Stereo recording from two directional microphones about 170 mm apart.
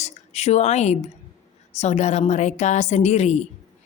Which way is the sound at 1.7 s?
40° left (ahead or behind).